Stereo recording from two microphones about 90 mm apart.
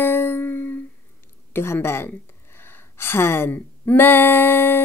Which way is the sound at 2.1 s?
25° left (ahead or behind).